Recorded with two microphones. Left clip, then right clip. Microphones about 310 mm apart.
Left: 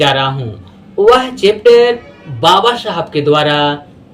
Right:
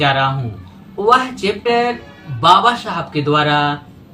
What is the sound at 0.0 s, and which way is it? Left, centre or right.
Speech, centre.